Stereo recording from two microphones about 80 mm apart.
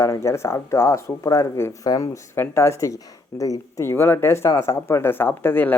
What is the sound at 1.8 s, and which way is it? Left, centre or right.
Speech, left.